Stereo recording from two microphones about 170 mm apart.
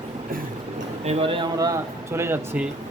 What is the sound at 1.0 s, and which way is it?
Speech, 35° right (ahead or behind).